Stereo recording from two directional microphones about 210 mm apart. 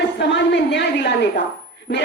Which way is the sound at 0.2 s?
55° left (ahead or behind).